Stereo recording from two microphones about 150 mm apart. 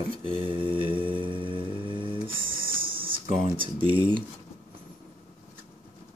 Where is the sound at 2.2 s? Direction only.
35° right (ahead or behind).